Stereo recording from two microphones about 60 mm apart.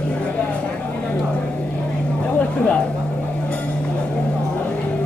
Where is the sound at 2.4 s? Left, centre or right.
Left.